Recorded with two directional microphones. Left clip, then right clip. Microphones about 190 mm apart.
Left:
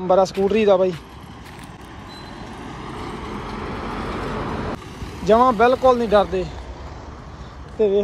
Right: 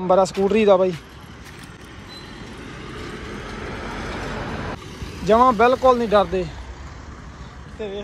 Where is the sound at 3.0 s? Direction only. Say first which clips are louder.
Left 2 dB; 55° left (ahead or behind).